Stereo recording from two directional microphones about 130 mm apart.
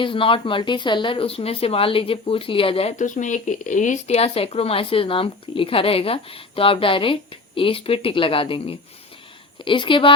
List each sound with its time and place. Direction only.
0.0 s speech: 40° left (ahead or behind)
3.0 s a woman's voice: 75° left (ahead or behind); by 10.1 s 40° left (ahead or behind)